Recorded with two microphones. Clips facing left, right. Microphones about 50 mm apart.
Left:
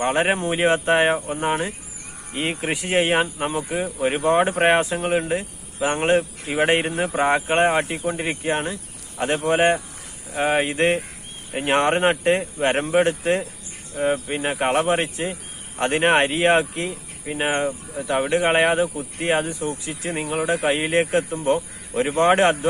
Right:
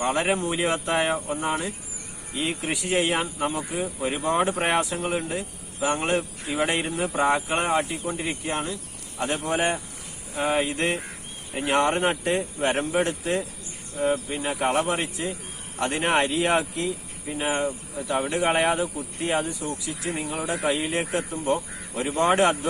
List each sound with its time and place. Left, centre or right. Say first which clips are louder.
0.0 s speech: left 3 dB; left